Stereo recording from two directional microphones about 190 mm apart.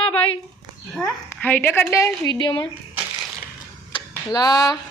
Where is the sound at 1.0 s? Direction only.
5° left (ahead or behind); by 2.7 s 25° left (ahead or behind).